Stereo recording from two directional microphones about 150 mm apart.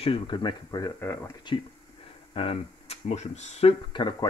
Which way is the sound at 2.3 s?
40° left (ahead or behind).